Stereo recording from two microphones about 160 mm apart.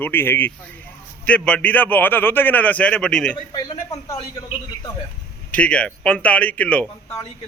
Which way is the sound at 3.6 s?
20° left (ahead or behind).